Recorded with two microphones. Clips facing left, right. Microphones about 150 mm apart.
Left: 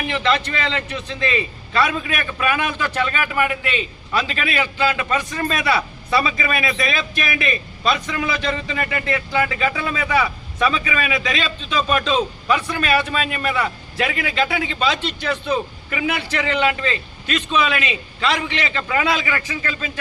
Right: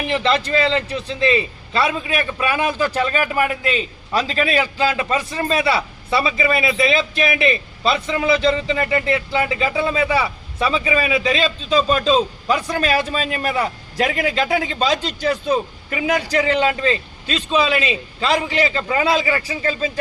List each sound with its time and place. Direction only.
0.1 s a man's voice: 35° right (ahead or behind)